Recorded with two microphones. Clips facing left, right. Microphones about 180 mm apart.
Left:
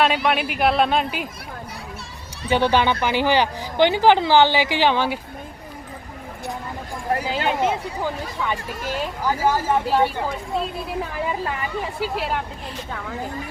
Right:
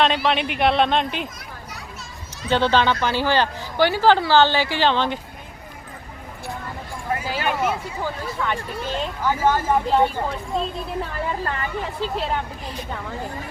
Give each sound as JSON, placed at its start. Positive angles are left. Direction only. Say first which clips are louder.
{"t": 0.3, "sound": "speech", "louder": "even", "side_deg": 5}
{"t": 2.5, "sound": "speech", "louder": "even", "side_deg": 15}
{"t": 7.3, "sound": "speech", "louder": "even", "side_deg": 25}
{"t": 8.0, "sound": "speech", "louder": "right 1 dB", "side_deg": 10}